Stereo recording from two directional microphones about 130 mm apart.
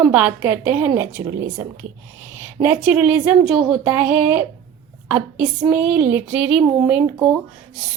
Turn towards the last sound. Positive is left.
turn(degrees=-5)  # may be behind; listen again after turning